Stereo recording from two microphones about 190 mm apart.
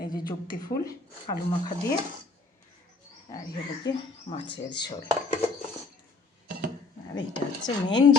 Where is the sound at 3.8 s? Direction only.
30° left (ahead or behind).